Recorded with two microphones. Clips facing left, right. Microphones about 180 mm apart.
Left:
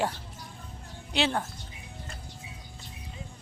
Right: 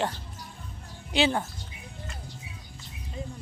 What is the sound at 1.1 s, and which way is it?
Speech, centre (ahead or behind).